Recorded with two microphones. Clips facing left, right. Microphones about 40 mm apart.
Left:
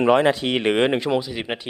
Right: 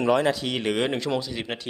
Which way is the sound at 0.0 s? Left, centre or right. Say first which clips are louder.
Left 5 dB; left.